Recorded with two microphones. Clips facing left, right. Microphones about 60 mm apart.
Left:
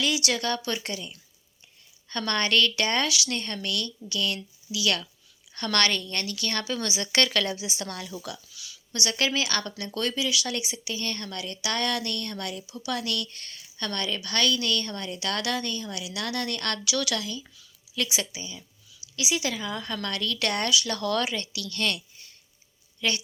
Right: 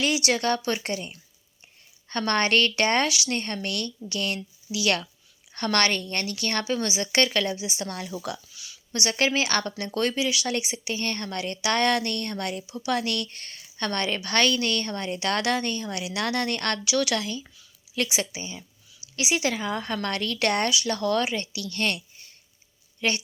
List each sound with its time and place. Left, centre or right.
0.0 s speech: right
6.7 s speech: centre
7.9 s speech: right
16.8 s speech: right
17.2 s speech: right